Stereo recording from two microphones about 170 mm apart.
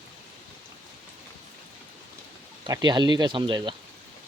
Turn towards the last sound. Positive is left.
turn(degrees=-30)  # may be behind; listen again after turning